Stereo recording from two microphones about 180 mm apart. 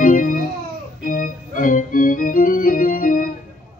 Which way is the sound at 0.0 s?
50° left (ahead or behind).